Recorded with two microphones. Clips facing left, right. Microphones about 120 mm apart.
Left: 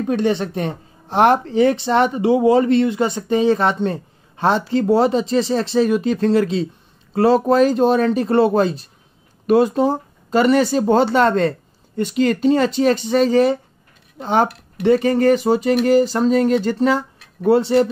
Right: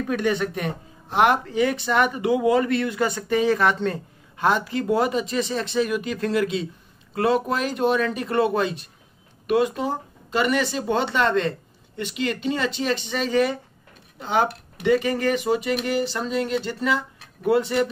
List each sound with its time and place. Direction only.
0.0 s speech: 30° left (ahead or behind)